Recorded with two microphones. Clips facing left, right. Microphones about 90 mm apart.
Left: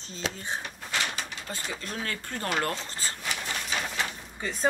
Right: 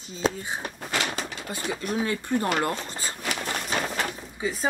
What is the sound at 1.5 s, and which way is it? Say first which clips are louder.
A woman's voice: right 9 dB; 15° right (ahead or behind).